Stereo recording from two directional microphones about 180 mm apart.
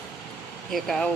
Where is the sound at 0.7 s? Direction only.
Centre (ahead or behind).